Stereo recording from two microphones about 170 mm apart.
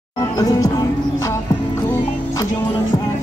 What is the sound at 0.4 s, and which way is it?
Music, 20° left (ahead or behind).